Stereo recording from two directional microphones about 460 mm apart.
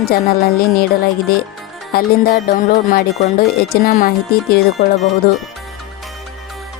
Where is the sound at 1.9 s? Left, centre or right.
Centre.